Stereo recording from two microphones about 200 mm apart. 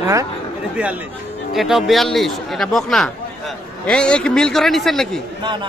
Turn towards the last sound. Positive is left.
turn(degrees=-25)  # may be behind; listen again after turning